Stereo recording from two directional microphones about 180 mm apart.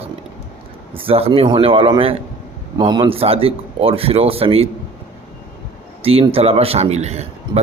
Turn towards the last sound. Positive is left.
turn(degrees=-35)  # may be behind; listen again after turning